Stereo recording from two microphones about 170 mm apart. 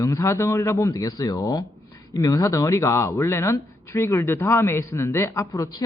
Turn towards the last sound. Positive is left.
turn(degrees=20)  # may be behind; listen again after turning